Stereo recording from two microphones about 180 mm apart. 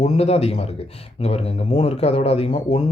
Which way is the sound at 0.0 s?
35° left (ahead or behind).